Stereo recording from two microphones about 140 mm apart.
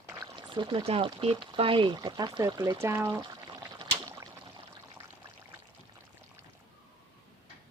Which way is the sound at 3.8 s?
35° right (ahead or behind).